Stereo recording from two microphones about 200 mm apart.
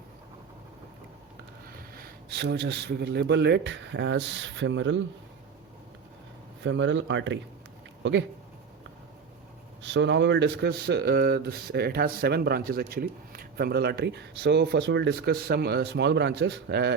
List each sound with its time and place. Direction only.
2.3 s speech: 55° right (ahead or behind)
6.6 s speech: 65° right (ahead or behind)
9.8 s speech: 65° right (ahead or behind)